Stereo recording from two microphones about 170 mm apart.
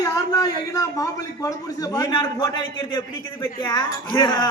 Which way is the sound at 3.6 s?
25° left (ahead or behind).